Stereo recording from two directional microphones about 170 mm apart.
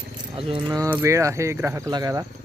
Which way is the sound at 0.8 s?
10° right (ahead or behind).